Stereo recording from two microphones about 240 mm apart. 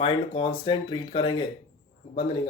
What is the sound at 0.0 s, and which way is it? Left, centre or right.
Speech, left.